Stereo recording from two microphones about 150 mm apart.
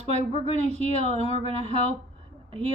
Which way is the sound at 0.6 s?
45° right (ahead or behind).